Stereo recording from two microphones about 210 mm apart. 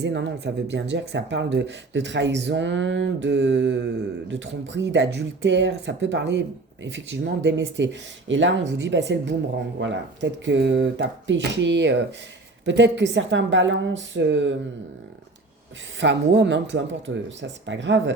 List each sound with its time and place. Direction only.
0.0 s speech: 55° right (ahead or behind)
16.0 s speech: 55° right (ahead or behind)